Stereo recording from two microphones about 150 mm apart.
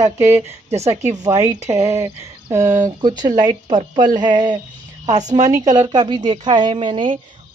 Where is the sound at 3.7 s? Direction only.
30° right (ahead or behind).